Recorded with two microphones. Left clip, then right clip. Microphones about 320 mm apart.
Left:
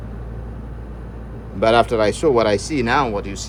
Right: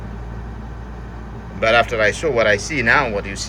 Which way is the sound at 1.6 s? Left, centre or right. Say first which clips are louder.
Even; centre.